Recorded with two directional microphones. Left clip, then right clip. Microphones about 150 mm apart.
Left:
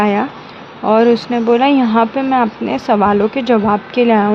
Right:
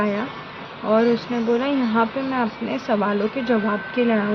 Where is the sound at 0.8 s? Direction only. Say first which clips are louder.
Left 8 dB; 65° left (ahead or behind); by 4.2 s 90° left.